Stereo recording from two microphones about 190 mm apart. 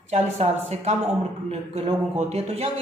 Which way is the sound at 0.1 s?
35° right (ahead or behind).